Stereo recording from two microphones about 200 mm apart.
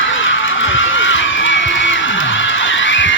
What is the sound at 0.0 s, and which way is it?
Run, 75° left (ahead or behind).